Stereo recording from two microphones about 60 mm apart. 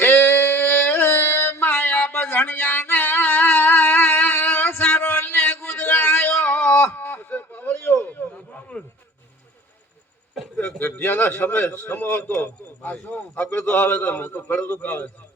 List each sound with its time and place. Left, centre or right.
0.0 s music: left
8.7 s a sound: left
10.6 s a man's voice: left